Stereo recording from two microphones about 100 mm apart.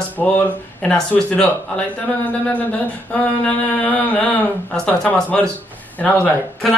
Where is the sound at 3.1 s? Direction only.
15° left (ahead or behind).